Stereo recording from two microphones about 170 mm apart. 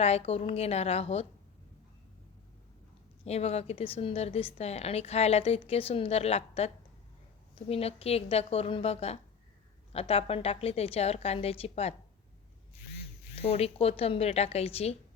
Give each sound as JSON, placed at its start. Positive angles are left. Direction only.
{"t": 0.0, "sound": "a woman's voice", "side_deg": 35}
{"t": 3.2, "sound": "a woman's voice", "side_deg": 40}
{"t": 7.7, "sound": "a woman's voice", "side_deg": 35}
{"t": 13.3, "sound": "a woman's voice", "side_deg": 35}